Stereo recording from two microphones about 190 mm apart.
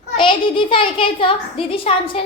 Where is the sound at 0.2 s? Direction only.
25° left (ahead or behind).